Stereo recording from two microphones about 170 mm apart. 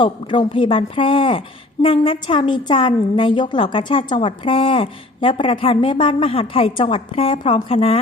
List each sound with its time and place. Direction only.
0.0 s a woman's voice: 30° left (ahead or behind)